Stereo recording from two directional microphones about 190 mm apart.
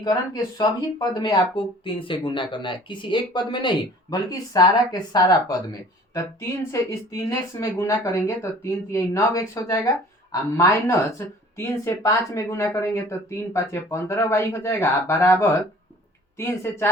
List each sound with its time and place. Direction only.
0.6 s speech: 20° left (ahead or behind)